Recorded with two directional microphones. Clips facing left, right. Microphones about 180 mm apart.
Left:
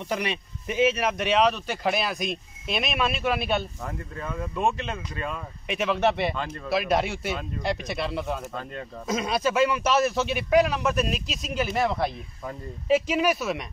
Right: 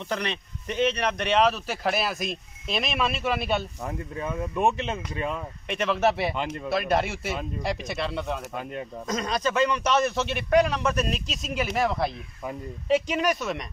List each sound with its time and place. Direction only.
0.1 s speech: 10° left (ahead or behind)
3.8 s speech: 15° right (ahead or behind)
5.7 s speech: centre (ahead or behind)
6.3 s speech: 15° right (ahead or behind)
6.7 s speech: centre (ahead or behind)